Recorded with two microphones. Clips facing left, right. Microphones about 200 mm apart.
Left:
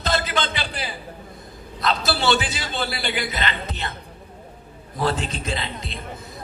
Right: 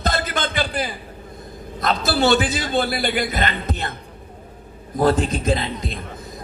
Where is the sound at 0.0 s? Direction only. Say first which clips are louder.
Right 1 dB; 50° right (ahead or behind).